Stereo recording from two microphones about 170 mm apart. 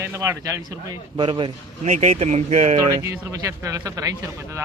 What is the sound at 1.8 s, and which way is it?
Speech, 40° right (ahead or behind).